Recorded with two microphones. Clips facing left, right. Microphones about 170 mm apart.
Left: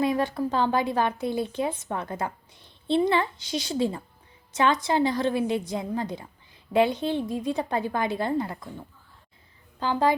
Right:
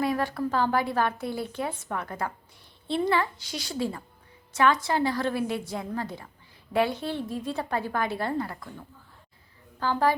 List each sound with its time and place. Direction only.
0.0 s speech: 20° left (ahead or behind)
9.8 s speech: 20° left (ahead or behind)